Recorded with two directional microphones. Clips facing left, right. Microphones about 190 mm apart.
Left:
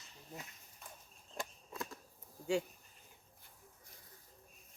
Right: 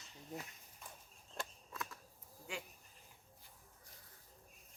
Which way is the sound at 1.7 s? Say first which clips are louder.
Left 4 dB; 30° left (ahead or behind).